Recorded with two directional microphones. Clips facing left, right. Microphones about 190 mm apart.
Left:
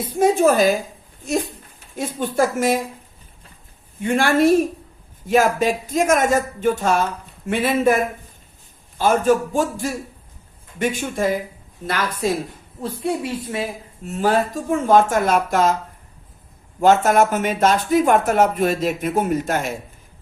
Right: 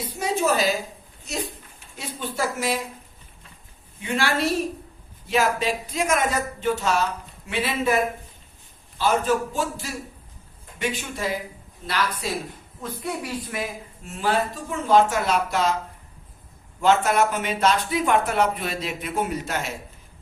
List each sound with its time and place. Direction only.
0.0 s speech: 50° left (ahead or behind)
2.0 s speech: 50° left (ahead or behind)
4.0 s speech: 50° left (ahead or behind)
13.0 s speech: 25° left (ahead or behind); by 15.7 s 50° left (ahead or behind)
16.8 s speech: 45° left (ahead or behind)